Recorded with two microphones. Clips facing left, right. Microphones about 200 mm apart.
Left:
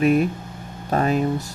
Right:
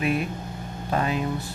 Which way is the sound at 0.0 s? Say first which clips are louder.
Left 8 dB; 45° left (ahead or behind).